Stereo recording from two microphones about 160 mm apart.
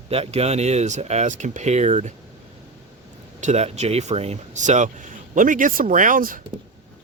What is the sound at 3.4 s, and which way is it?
Speech, 45° right (ahead or behind).